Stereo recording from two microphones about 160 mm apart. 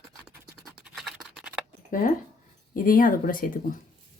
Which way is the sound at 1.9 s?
60° left (ahead or behind).